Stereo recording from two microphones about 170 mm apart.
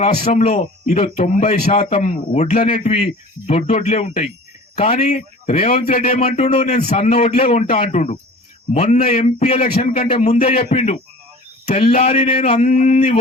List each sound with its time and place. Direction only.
0.0 s a man's voice: 40° left (ahead or behind)
9.6 s speech: 60° left (ahead or behind)
9.8 s a man's voice: 40° left (ahead or behind)